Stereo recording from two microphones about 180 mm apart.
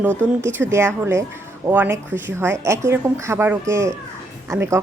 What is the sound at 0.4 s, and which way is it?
Speech, 15° right (ahead or behind).